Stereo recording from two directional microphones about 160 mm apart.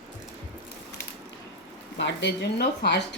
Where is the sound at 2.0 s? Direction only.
90° left.